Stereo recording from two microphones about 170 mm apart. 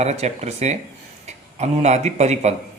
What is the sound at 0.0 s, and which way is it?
Speech, 40° right (ahead or behind).